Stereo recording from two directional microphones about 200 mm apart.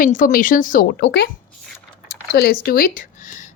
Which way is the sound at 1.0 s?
60° left (ahead or behind).